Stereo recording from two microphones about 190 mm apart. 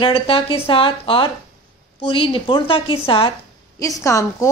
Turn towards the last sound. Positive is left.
turn(degrees=15)  # may be behind; listen again after turning